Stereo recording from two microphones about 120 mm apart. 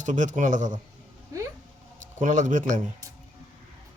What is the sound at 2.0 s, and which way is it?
Speech, 90° right.